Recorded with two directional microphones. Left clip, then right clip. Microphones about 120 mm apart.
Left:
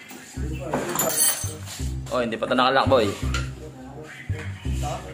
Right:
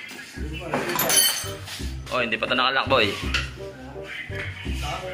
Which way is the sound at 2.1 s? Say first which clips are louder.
Even; 40° left (ahead or behind).